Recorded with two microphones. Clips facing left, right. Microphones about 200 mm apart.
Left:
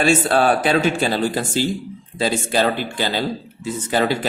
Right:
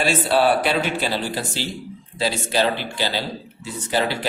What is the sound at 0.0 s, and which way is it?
Speech, 50° left (ahead or behind).